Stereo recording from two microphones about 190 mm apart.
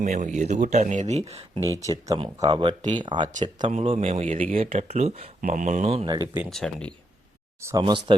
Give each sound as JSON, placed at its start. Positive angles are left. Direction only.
{"t": 0.0, "sound": "speech", "side_deg": -40}
{"t": 3.7, "sound": "speech", "side_deg": -35}
{"t": 6.3, "sound": "speech", "side_deg": 0}
{"t": 7.6, "sound": "speech", "side_deg": -20}